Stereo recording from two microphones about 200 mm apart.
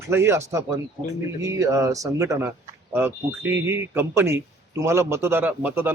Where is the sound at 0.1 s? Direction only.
15° right (ahead or behind).